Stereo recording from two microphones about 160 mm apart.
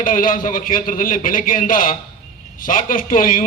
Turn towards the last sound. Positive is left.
turn(degrees=60)  # may be behind; listen again after turning